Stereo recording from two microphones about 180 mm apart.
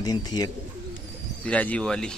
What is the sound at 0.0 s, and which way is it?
Speech, 20° left (ahead or behind).